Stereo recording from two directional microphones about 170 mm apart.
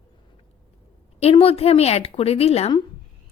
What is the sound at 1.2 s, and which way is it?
A woman's voice, 35° left (ahead or behind).